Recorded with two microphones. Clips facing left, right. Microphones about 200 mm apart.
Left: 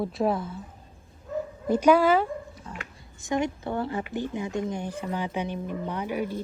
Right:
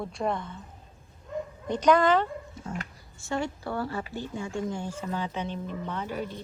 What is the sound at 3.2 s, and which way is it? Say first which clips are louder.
Speech: left 4 dB; 20° left (ahead or behind).